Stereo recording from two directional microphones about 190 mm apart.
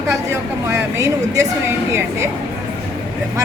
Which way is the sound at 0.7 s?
15° right (ahead or behind).